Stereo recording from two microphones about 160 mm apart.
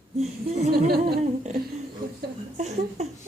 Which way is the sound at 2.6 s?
45° right (ahead or behind).